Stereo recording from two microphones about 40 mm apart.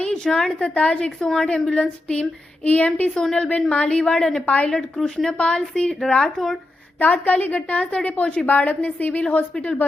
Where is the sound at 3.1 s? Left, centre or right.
Centre.